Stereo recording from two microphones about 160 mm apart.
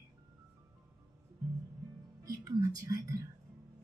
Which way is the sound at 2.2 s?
20° right (ahead or behind).